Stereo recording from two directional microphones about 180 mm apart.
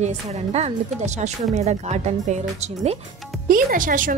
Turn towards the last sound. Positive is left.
turn(degrees=-50)  # may be behind; listen again after turning